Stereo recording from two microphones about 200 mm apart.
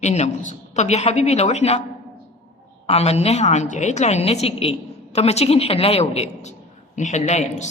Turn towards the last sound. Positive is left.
turn(degrees=35)  # may be behind; listen again after turning